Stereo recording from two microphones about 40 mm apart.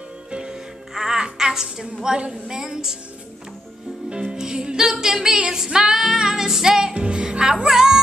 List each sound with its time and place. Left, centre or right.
0.3 s music: right
0.9 s music: centre
1.2 s a sound: centre
2.0 s a woman's voice: right
2.5 s music: centre
4.1 s music: right